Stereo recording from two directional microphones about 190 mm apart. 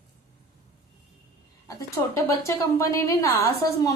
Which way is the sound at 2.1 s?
15° left (ahead or behind).